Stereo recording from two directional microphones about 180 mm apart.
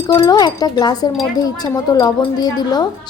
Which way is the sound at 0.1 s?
20° left (ahead or behind).